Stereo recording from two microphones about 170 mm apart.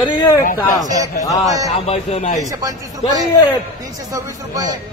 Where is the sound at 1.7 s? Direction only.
35° left (ahead or behind).